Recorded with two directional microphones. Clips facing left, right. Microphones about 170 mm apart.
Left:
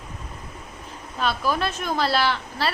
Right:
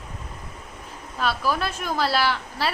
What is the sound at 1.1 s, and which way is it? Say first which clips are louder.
A woman's voice: even; 5° right (ahead or behind).